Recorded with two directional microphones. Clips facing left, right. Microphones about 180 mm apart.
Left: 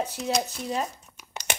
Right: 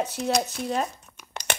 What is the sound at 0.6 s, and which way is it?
Speech, 55° right (ahead or behind).